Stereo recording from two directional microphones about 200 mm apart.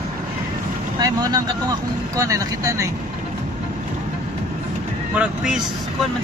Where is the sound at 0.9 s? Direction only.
20° right (ahead or behind).